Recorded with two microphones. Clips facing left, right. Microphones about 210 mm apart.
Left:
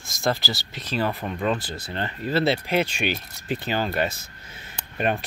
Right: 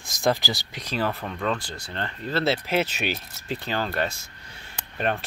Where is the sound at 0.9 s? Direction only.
10° left (ahead or behind).